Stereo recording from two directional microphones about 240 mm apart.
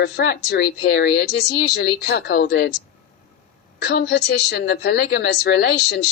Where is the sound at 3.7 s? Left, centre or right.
Left.